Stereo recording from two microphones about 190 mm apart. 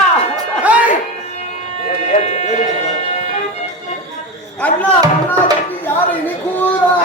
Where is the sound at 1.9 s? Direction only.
35° left (ahead or behind).